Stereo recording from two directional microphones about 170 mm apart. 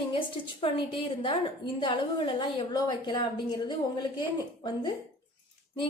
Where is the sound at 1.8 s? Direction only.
30° left (ahead or behind).